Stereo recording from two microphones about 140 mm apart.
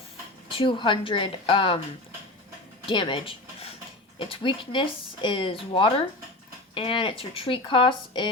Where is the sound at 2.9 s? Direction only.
35° left (ahead or behind).